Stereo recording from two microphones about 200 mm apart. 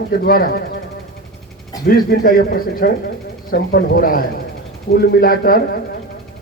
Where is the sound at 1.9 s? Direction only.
45° left (ahead or behind).